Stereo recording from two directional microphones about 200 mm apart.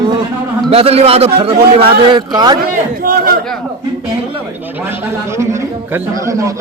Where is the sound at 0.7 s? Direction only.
30° right (ahead or behind).